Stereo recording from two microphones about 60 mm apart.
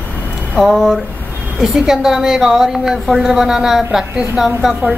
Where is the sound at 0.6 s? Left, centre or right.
Centre.